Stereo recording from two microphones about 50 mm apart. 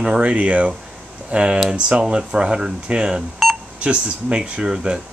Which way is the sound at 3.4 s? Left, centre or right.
Centre.